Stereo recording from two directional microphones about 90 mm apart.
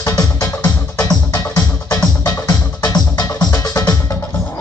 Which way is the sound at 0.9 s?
45° left (ahead or behind).